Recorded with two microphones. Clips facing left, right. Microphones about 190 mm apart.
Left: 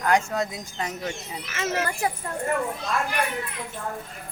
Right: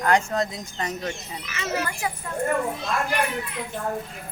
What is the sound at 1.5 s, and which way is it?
Speech, 45° left (ahead or behind).